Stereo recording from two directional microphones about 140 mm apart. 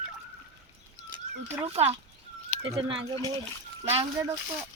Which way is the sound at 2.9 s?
30° right (ahead or behind).